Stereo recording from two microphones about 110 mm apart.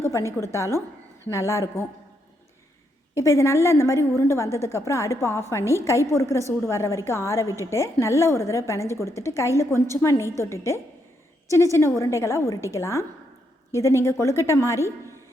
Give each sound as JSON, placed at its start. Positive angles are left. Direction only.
{"t": 0.0, "sound": "a sound", "side_deg": 25}
{"t": 0.3, "sound": "a woman's voice", "side_deg": 25}
{"t": 3.2, "sound": "a woman's voice", "side_deg": 25}